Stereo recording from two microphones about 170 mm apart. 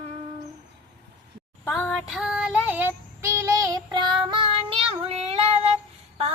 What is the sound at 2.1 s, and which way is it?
Child singing, 5° right (ahead or behind).